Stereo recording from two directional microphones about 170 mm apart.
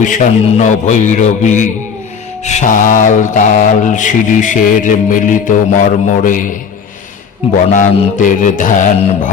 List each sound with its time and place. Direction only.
0.0 s mantra: 45° left (ahead or behind)
7.7 s mantra: 50° left (ahead or behind)